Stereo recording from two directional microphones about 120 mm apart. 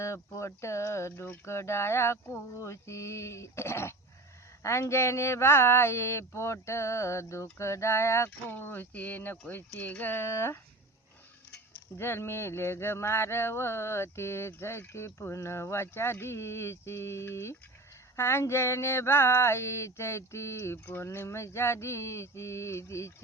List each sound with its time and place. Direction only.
0.0 s speech: 25° left (ahead or behind)